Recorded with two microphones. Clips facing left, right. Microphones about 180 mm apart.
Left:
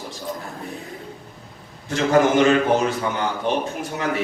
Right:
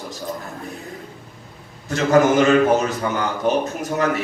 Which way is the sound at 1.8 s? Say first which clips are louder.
Right 2 dB; 40° right (ahead or behind).